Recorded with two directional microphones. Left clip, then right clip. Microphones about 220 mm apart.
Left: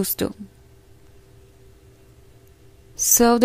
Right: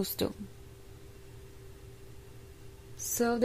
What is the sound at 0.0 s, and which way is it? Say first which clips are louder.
Speech: left 8 dB; 25° left (ahead or behind).